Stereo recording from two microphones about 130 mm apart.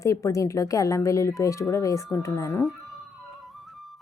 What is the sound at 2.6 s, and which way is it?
Music, centre (ahead or behind).